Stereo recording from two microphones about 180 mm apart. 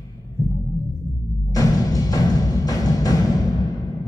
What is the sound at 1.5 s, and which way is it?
Music, 20° left (ahead or behind).